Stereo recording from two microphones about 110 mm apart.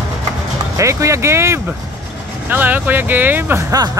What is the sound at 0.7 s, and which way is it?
Speech, 30° right (ahead or behind).